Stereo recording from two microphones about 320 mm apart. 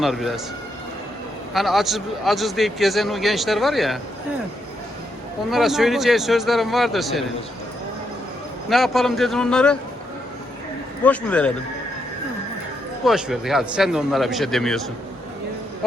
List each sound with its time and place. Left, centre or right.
0.0 s a man's voice: centre
1.5 s a man's voice: centre
5.5 s a man's voice: centre
8.7 s a man's voice: centre
11.0 s a man's voice: centre
13.1 s a man's voice: centre